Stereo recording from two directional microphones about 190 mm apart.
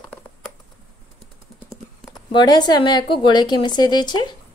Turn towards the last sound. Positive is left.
turn(degrees=25)  # may be behind; listen again after turning